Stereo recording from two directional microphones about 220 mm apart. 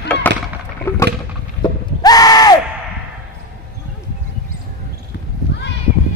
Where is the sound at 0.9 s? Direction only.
10° left (ahead or behind).